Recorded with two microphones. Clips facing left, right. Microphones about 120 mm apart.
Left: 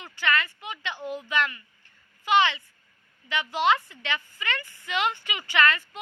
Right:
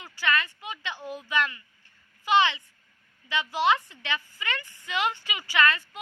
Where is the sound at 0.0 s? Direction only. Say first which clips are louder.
Left 1 dB; 15° right (ahead or behind).